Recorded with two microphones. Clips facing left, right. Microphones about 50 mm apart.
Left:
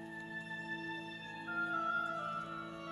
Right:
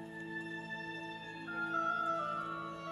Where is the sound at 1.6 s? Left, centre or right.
Centre.